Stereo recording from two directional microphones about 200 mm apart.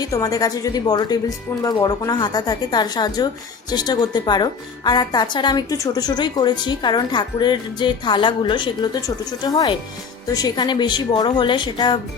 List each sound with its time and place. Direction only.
0.0 s a woman's voice: 20° left (ahead or behind)